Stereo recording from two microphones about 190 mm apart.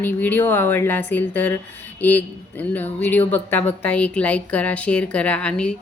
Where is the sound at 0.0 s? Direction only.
10° left (ahead or behind).